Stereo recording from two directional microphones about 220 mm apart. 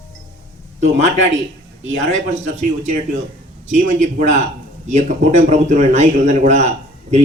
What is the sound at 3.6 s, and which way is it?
A man's voice, 30° right (ahead or behind).